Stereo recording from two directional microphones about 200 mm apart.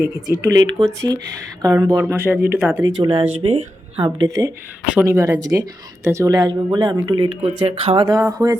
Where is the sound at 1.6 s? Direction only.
15° right (ahead or behind).